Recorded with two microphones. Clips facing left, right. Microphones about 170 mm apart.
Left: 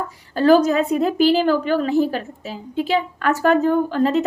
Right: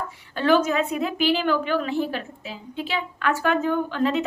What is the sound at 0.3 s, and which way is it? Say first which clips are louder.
A woman's voice: left 6 dB; 40° left (ahead or behind).